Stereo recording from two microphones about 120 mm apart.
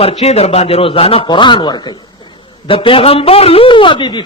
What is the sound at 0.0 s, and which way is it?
A man's voice, 55° left (ahead or behind).